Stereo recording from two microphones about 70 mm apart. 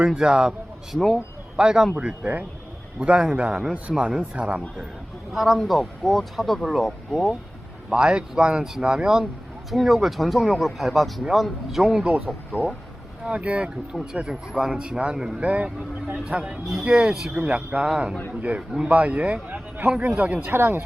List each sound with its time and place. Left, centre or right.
0.0 s speech: centre
0.9 s speech: centre
1.5 s a man's voice: centre
5.3 s speech: centre
7.9 s speech: centre
12.5 s speech: centre
14.0 s a man's voice: centre
18.9 s a man's voice: right
20.5 s speech: right